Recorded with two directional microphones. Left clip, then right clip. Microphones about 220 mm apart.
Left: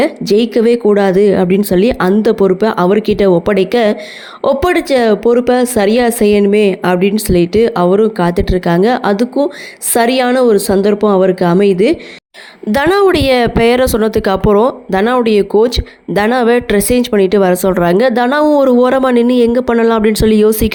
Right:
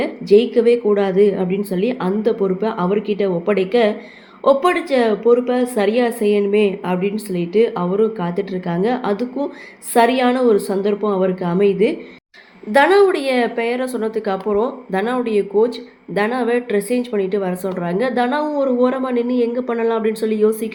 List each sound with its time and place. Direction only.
0.0 s speech: 50° left (ahead or behind)